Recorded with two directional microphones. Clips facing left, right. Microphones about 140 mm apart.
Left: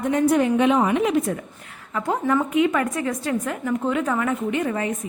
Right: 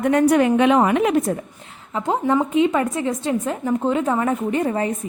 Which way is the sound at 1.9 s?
20° right (ahead or behind).